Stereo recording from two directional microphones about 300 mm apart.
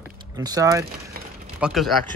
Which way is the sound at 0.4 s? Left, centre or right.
Centre.